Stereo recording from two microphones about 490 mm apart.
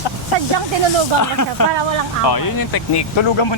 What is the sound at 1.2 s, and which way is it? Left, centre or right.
Speech, left.